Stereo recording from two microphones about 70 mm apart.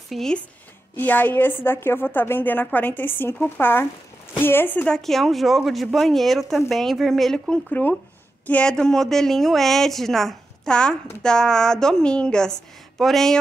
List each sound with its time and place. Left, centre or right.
0.1 s speech: centre
0.9 s a woman's voice: left
4.8 s speech: centre
7.8 s a woman's voice: left
8.6 s a woman's voice: centre